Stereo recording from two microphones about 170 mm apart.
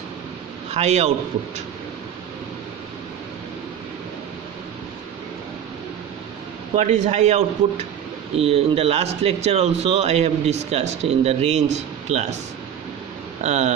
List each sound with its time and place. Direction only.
0.7 s a man's voice: 40° right (ahead or behind)
6.7 s a man's voice: 45° right (ahead or behind)
13.4 s speech: 40° right (ahead or behind)